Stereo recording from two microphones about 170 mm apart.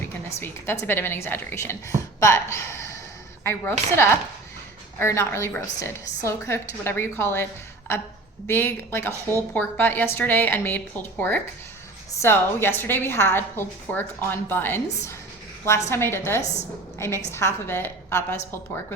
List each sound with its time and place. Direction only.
0.3 s a woman's voice: 15° left (ahead or behind)
8.4 s a woman's voice: 15° left (ahead or behind)